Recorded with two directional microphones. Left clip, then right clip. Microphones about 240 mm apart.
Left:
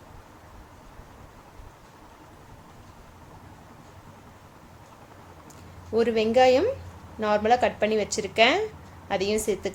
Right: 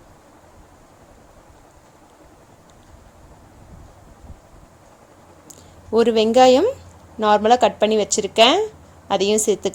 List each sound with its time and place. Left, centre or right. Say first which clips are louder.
5.9 s a woman's voice: right 7 dB; right